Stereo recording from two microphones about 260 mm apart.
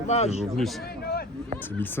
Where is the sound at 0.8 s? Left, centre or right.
Left.